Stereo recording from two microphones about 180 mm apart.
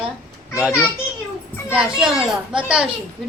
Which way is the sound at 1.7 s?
5° right (ahead or behind).